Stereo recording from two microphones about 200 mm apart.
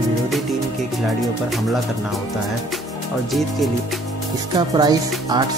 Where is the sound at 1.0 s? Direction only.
Centre (ahead or behind).